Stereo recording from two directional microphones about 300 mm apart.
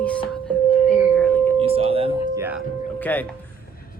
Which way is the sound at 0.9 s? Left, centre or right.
Centre.